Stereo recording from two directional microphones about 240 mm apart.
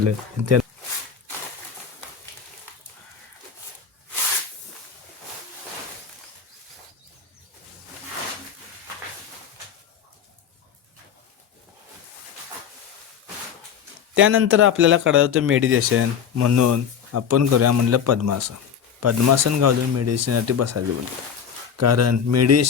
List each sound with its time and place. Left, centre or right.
0.0 s speech: right
14.2 s speech: right